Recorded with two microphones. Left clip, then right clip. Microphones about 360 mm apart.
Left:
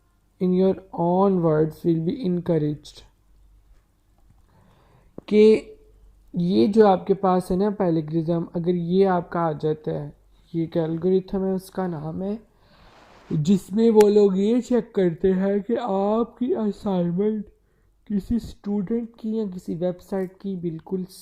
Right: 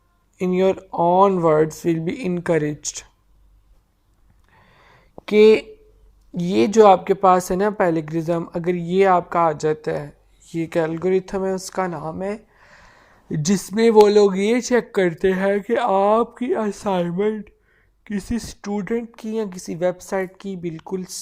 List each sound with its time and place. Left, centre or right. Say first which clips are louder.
0.3 s speech: right 3 dB; right
4.9 s a sound: right 4 dB; right
6.6 s speech: right 5 dB; right